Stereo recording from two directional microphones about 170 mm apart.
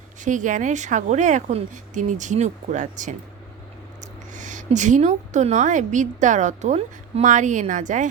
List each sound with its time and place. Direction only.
0.2 s a woman's voice: 45° right (ahead or behind)